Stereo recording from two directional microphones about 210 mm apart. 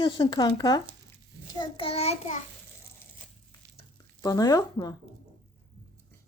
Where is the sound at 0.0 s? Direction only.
20° left (ahead or behind).